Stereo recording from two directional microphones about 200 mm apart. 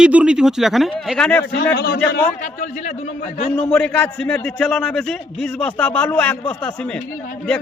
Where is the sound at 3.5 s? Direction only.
5° left (ahead or behind).